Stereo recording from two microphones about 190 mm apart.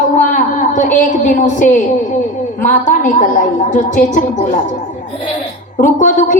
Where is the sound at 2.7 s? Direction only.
40° left (ahead or behind).